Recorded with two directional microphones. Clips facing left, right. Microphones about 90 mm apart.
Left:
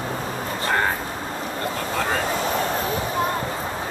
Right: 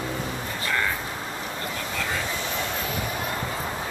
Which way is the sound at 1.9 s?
45° left (ahead or behind).